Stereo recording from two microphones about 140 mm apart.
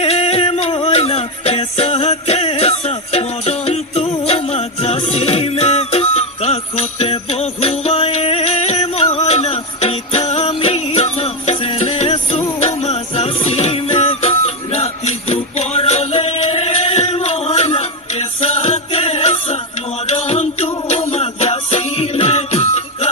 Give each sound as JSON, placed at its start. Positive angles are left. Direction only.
{"t": 0.0, "sound": "music", "side_deg": 45}
{"t": 9.1, "sound": "jingle bell", "side_deg": 50}